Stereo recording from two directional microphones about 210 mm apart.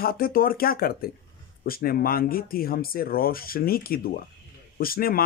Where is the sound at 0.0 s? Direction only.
45° left (ahead or behind).